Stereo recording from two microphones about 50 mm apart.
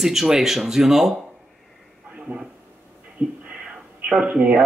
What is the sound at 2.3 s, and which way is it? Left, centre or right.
Speech, right.